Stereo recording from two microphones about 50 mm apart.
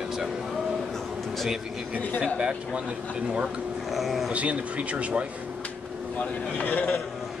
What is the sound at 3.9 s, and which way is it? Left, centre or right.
Speech, centre.